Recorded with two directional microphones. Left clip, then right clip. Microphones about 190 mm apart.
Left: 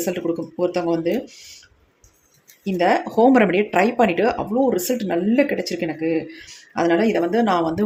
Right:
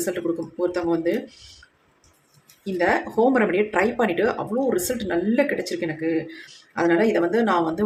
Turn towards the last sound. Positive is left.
turn(degrees=25)  # may be behind; listen again after turning